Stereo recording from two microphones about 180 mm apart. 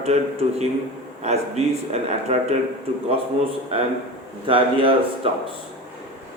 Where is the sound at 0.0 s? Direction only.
35° right (ahead or behind).